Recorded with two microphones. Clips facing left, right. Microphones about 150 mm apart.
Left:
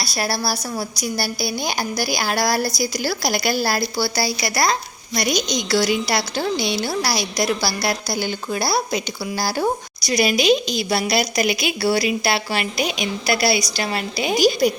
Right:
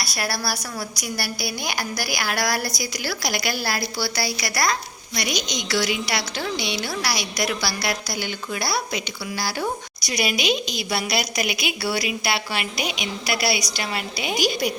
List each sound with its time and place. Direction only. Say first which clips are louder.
0.0 s a woman's voice: left 4 dB; 25° left (ahead or behind)
5.1 s a woman's voice: left 6 dB; 40° left (ahead or behind)